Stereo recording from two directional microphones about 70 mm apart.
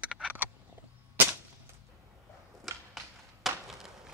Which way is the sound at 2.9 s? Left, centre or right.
Centre.